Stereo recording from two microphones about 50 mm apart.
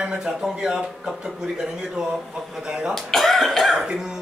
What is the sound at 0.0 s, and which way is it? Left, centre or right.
A man's voice, centre.